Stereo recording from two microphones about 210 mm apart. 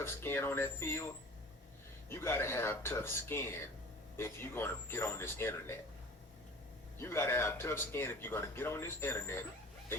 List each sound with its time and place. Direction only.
0.0 s speech: 10° left (ahead or behind)
2.0 s speech: 10° left (ahead or behind)
7.0 s speech: 10° left (ahead or behind)